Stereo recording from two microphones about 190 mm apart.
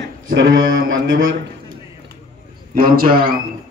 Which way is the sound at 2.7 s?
50° right (ahead or behind).